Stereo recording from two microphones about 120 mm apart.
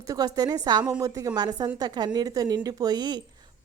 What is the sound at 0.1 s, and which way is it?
A woman's voice, 30° right (ahead or behind).